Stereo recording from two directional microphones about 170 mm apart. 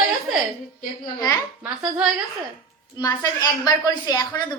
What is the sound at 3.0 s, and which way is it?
A woman's voice, 20° left (ahead or behind).